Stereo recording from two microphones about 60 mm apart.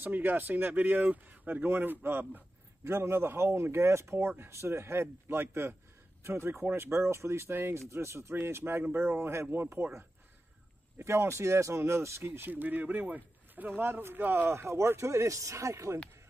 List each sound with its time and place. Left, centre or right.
0.0 s speech: right
11.0 s speech: right
12.3 s speech: right
14.5 s speech: right